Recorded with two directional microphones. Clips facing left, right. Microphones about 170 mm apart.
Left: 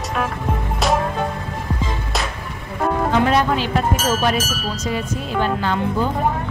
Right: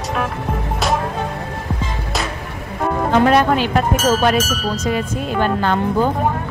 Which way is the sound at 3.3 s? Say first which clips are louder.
Right 4 dB; 60° right (ahead or behind).